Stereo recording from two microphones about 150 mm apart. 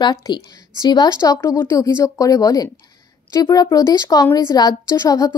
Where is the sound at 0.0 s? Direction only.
30° left (ahead or behind).